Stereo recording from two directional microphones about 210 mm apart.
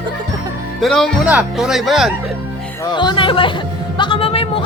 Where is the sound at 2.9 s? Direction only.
20° left (ahead or behind).